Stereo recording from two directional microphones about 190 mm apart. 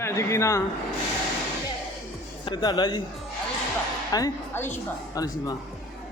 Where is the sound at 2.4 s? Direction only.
20° left (ahead or behind).